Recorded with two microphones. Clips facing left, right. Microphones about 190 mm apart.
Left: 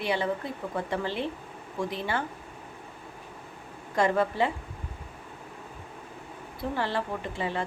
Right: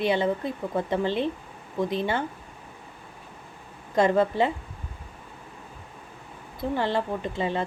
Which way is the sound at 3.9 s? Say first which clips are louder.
Right 4 dB; 25° right (ahead or behind).